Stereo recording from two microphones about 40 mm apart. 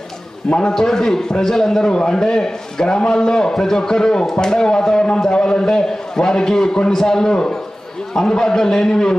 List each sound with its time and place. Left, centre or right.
0.5 s a man's voice: centre
1.9 s a man's voice: left